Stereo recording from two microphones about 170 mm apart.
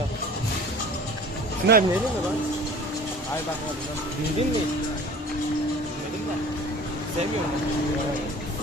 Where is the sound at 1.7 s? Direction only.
90° right.